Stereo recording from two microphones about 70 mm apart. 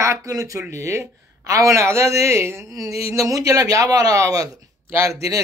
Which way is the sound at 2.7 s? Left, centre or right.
Right.